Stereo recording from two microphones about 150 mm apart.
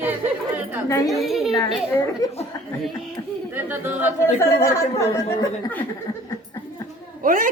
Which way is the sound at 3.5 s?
15° right (ahead or behind).